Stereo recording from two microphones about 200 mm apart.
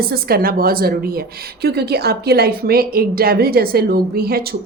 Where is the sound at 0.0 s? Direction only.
50° right (ahead or behind).